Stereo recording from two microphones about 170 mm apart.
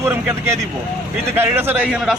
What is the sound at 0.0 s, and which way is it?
A man's voice, 15° right (ahead or behind).